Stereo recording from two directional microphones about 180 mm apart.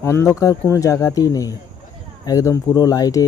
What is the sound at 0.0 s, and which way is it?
Speech, 15° left (ahead or behind).